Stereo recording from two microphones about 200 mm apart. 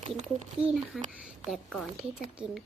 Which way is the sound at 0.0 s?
35° right (ahead or behind).